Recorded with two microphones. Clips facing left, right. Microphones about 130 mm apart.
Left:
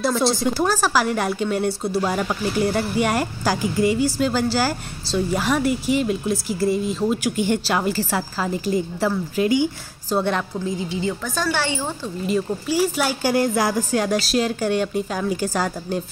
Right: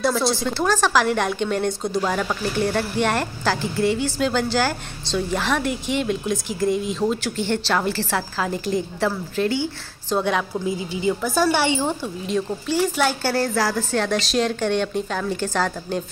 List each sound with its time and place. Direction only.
0.0 s speech: centre (ahead or behind)
0.5 s a woman's voice: 10° left (ahead or behind)
10.6 s a woman's voice: 15° right (ahead or behind)
12.3 s a woman's voice: 5° left (ahead or behind)